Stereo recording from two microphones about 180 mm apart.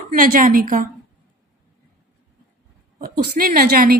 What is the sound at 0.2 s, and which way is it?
Speech, 50° right (ahead or behind).